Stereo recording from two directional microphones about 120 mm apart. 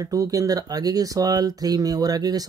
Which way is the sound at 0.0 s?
30° right (ahead or behind).